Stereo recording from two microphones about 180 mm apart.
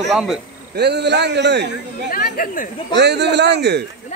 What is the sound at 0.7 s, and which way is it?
Speech, 70° right (ahead or behind).